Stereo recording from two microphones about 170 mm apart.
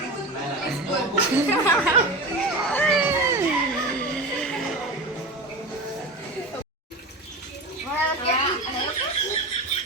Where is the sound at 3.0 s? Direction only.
15° right (ahead or behind).